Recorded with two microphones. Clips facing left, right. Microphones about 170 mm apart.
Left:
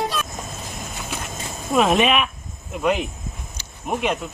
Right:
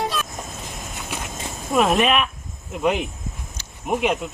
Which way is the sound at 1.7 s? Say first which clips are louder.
Left 1 dB; centre (ahead or behind).